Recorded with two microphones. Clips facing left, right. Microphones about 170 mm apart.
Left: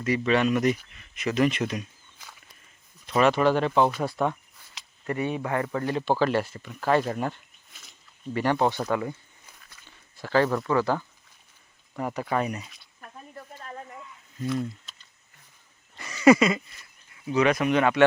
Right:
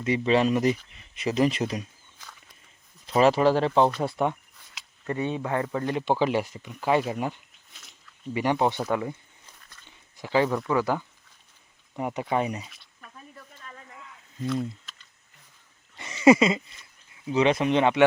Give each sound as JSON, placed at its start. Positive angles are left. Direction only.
{"t": 0.0, "sound": "speech", "side_deg": -25}
{"t": 3.1, "sound": "speech", "side_deg": -30}
{"t": 7.7, "sound": "biting", "side_deg": 0}
{"t": 8.3, "sound": "speech", "side_deg": -15}
{"t": 9.5, "sound": "biting", "side_deg": 10}
{"t": 10.2, "sound": "speech", "side_deg": -15}
{"t": 13.0, "sound": "a sound", "side_deg": 55}
{"t": 16.0, "sound": "a sound", "side_deg": -25}
{"t": 17.2, "sound": "speech", "side_deg": -25}